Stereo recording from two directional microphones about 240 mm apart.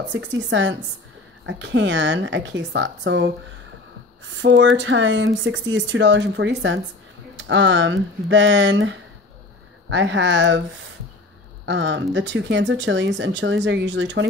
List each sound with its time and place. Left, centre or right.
0.1 s speech: right
4.4 s speech: right
11.6 s speech: right